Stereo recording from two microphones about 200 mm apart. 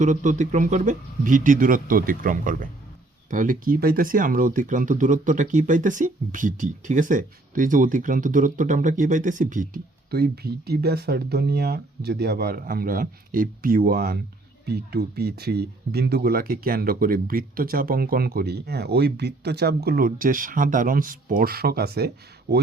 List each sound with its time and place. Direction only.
0.0 s a man's voice: 40° right (ahead or behind)